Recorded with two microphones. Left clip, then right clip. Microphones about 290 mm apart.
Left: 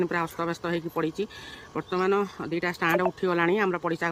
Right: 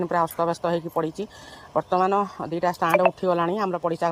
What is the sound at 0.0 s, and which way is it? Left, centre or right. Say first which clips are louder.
Speech: right 5 dB; centre.